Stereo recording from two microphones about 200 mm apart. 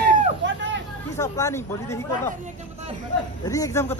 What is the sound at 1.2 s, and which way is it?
Speech, 15° left (ahead or behind).